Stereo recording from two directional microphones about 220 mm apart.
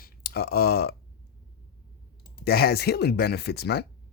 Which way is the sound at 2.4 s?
45° left (ahead or behind).